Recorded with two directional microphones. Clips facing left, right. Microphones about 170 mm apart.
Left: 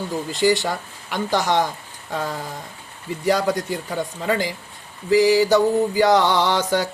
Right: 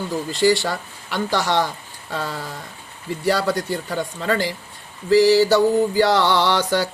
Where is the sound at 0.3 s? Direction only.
20° left (ahead or behind).